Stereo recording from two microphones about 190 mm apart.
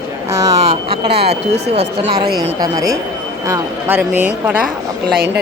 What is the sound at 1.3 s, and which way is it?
Speech, 35° right (ahead or behind).